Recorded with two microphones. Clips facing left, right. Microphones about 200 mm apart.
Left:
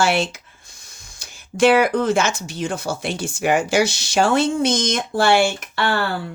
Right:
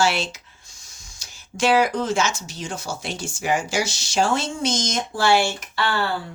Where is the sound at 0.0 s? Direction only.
55° left (ahead or behind).